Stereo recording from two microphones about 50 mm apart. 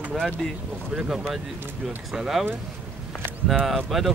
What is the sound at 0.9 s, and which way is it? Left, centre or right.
Speech, centre.